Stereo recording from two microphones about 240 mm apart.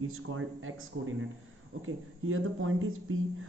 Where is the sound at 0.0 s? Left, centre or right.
Right.